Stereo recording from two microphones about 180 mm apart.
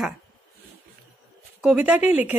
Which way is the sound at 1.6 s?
5° right (ahead or behind).